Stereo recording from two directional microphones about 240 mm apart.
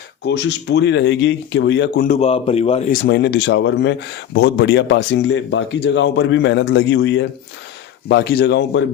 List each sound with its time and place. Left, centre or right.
0.3 s speech: left
2.0 s speech: left